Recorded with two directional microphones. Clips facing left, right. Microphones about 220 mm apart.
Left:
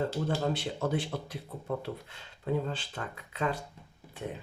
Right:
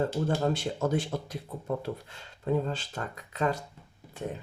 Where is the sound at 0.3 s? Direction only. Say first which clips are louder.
Right 3 dB; 45° right (ahead or behind).